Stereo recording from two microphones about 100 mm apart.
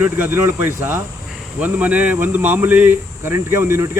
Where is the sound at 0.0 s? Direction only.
20° right (ahead or behind).